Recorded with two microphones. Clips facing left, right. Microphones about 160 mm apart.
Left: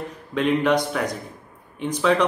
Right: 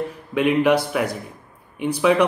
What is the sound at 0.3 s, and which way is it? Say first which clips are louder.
Speech: right 2 dB; 10° right (ahead or behind).